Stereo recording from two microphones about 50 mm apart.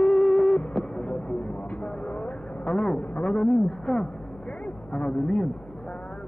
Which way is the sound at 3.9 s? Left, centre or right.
Centre.